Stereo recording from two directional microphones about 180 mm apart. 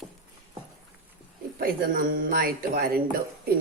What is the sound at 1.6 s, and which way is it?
Speech, 50° right (ahead or behind).